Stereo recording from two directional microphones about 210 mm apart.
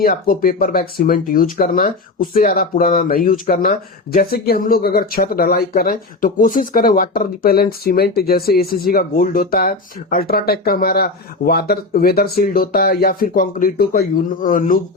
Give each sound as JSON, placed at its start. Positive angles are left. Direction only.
{"t": 0.0, "sound": "speech", "side_deg": 45}